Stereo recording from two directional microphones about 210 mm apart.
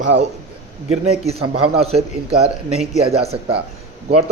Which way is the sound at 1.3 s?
30° right (ahead or behind).